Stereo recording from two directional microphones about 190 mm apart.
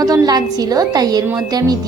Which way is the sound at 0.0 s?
20° right (ahead or behind).